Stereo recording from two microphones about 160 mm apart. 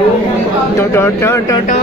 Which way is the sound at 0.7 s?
15° left (ahead or behind).